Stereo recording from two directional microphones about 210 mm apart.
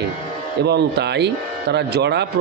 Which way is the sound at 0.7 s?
55° right (ahead or behind).